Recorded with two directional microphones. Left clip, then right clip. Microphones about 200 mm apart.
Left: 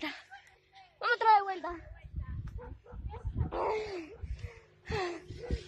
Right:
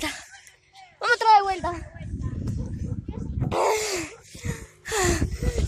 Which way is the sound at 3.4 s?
40° right (ahead or behind).